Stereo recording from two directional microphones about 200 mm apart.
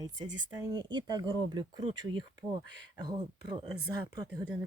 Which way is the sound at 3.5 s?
25° right (ahead or behind).